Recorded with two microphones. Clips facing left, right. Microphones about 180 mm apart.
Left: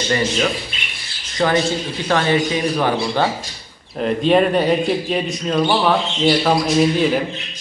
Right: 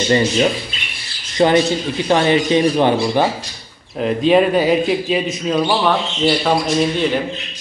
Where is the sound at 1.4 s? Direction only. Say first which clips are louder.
Right 4 dB; 20° right (ahead or behind).